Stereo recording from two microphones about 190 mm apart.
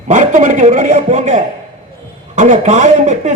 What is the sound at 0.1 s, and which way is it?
A man's voice, 40° right (ahead or behind).